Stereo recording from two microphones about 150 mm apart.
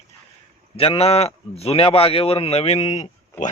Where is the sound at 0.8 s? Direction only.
40° left (ahead or behind).